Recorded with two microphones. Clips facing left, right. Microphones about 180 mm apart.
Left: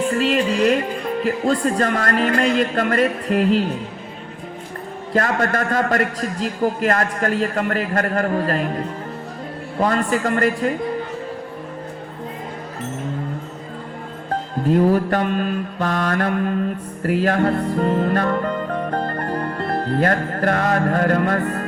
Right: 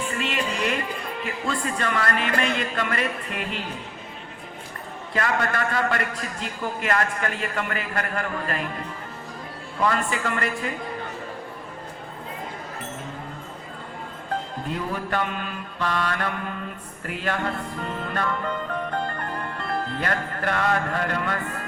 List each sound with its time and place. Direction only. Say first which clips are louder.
0.1 s music: left 9 dB; 40° left (ahead or behind)
1.2 s a man's voice: left 10 dB; 40° left (ahead or behind)
5.1 s a man's voice: left 5 dB; 40° left (ahead or behind)
14.7 s mantra: left 13 dB; 45° left (ahead or behind)